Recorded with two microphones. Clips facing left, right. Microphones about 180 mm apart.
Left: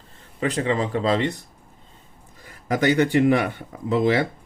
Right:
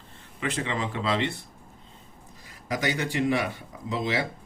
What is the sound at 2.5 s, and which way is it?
A man's voice, 55° left (ahead or behind).